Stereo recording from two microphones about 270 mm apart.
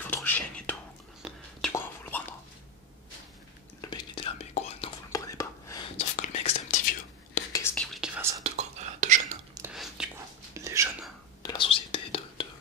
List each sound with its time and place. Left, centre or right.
0.0 s whispering: centre
3.8 s whispering: centre
5.9 s whispering: left
7.5 s whispering: centre
8.5 s whispering: right
9.6 s whispering: centre
11.4 s whispering: centre